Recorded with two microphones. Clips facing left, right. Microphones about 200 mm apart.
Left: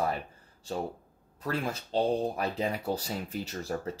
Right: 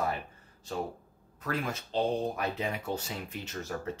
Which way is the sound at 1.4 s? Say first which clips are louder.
Left 1 dB; 35° left (ahead or behind).